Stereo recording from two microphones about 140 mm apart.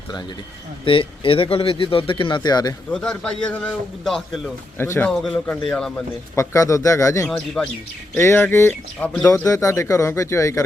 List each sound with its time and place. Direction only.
0.9 s speech: 40° left (ahead or behind)
2.9 s a man's voice: 5° left (ahead or behind)
4.8 s a man's voice: 15° left (ahead or behind)
5.2 s speech: centre (ahead or behind)
6.3 s speech: 20° left (ahead or behind)
7.3 s speech: 5° left (ahead or behind)
8.1 s a man's voice: 15° left (ahead or behind)
9.4 s speech: 25° left (ahead or behind)